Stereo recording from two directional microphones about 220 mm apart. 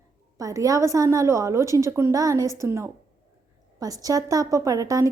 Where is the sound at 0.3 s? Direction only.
15° right (ahead or behind).